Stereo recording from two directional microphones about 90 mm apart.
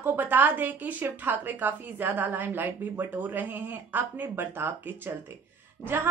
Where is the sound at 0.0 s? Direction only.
20° right (ahead or behind).